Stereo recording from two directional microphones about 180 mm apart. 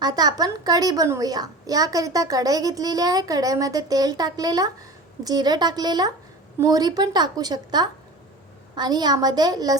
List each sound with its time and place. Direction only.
0.0 s a woman's voice: 20° right (ahead or behind)